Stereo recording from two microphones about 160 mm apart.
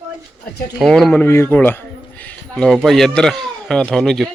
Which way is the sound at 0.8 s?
5° left (ahead or behind).